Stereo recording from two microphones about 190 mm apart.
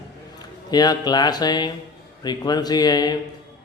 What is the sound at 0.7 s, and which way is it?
Speech, 20° left (ahead or behind).